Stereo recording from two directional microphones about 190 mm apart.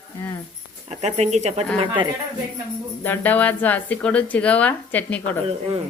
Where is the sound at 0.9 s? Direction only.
35° right (ahead or behind).